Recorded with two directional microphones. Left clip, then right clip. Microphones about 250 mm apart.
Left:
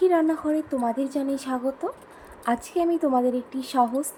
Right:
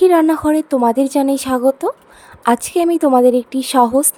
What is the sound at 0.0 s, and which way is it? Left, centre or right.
A woman's voice, right.